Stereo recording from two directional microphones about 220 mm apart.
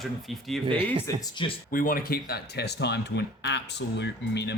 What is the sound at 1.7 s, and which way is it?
Speech, 40° left (ahead or behind).